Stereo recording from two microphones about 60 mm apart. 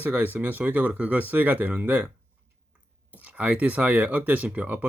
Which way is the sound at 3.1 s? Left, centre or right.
Right.